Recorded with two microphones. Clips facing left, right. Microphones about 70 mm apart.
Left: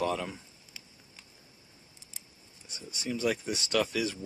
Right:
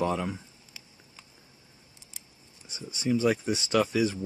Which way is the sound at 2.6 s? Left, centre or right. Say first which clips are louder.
Right 7 dB; centre.